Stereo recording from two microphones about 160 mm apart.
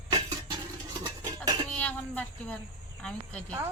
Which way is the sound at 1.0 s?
25° right (ahead or behind).